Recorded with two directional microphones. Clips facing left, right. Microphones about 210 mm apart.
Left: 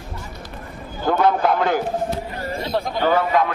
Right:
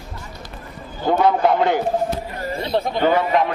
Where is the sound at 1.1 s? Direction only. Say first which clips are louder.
Right 1 dB; 20° right (ahead or behind).